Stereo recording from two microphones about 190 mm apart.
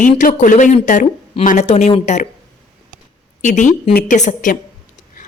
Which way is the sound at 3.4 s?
40° left (ahead or behind).